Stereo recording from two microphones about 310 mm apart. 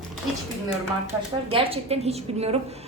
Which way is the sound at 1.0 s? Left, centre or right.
Centre.